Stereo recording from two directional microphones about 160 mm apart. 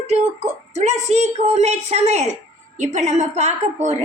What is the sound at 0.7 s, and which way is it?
A woman's voice, 45° right (ahead or behind).